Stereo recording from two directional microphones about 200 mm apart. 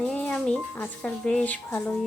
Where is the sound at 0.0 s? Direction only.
5° left (ahead or behind).